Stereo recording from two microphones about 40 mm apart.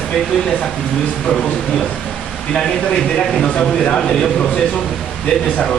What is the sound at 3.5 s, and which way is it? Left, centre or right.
Speech, left.